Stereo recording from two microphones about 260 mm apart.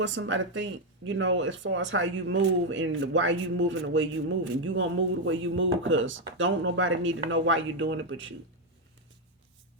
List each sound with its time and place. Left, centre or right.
0.0 s speech: right